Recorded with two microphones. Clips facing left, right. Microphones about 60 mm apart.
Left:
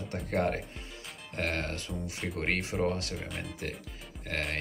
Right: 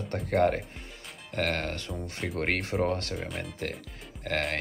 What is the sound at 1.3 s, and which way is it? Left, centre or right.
Speech, right.